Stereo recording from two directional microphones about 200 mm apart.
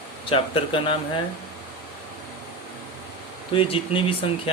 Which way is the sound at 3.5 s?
25° left (ahead or behind).